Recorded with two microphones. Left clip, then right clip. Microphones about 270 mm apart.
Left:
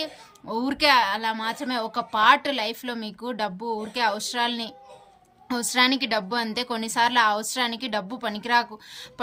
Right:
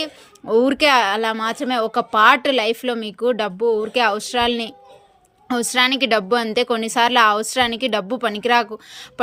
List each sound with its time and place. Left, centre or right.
0.0 s a woman's voice: centre